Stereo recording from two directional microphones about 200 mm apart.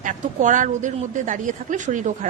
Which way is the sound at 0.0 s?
40° right (ahead or behind).